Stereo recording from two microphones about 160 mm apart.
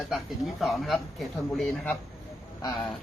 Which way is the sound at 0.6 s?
Centre (ahead or behind).